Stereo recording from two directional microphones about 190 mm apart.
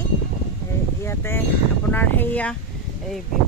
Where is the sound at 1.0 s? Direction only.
15° left (ahead or behind).